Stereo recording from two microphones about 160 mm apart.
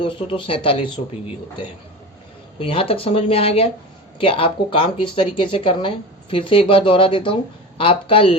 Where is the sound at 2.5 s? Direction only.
35° left (ahead or behind).